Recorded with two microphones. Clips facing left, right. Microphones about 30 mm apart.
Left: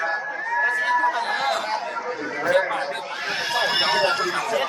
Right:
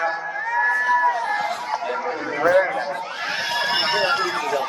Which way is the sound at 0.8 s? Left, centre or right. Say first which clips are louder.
Right 2 dB; left.